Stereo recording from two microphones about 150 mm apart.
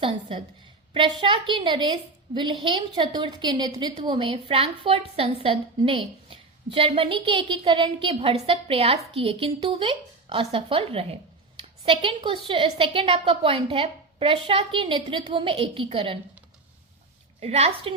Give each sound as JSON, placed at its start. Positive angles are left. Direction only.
{"t": 0.0, "sound": "a woman's voice", "side_deg": -35}
{"t": 17.4, "sound": "a woman's voice", "side_deg": -45}